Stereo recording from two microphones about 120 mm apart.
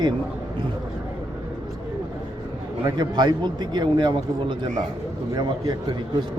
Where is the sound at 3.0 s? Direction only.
40° right (ahead or behind).